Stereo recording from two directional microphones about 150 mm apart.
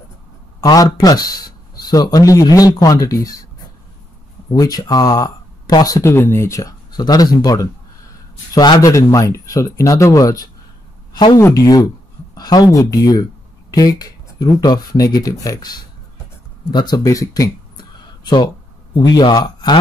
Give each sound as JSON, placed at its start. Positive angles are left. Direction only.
{"t": 0.6, "sound": "speech", "side_deg": 25}
{"t": 4.6, "sound": "speech", "side_deg": 25}